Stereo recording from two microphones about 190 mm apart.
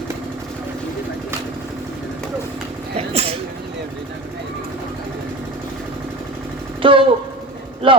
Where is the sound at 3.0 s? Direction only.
30° right (ahead or behind).